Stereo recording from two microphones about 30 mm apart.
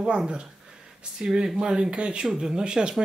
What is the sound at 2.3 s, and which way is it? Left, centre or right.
Speech, right.